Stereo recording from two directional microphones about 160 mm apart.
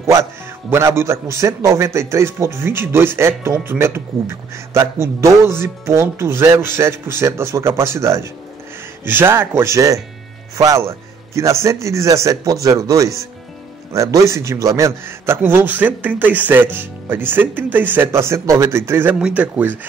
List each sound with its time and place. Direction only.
0.0 s a man's voice: 15° right (ahead or behind)